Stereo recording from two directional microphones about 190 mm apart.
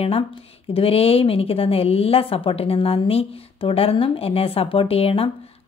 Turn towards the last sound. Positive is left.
turn(degrees=30)  # may be behind; listen again after turning